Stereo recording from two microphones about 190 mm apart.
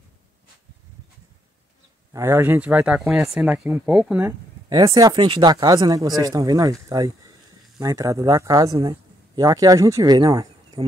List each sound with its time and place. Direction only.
2.1 s speech: 15° right (ahead or behind)